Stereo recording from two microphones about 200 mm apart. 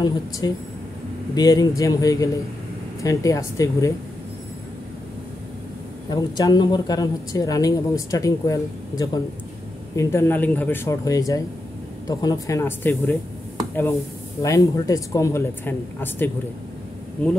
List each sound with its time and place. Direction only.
0.4 s speech: 20° left (ahead or behind)
6.0 s speech: 20° left (ahead or behind)
14.4 s speech: 15° left (ahead or behind)